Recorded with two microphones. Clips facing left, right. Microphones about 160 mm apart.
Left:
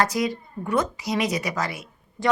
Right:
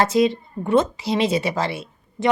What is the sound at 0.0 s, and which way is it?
Speech, 25° right (ahead or behind).